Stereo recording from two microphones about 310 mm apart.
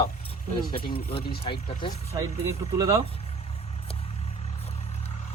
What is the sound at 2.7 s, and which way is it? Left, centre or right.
Speech, centre.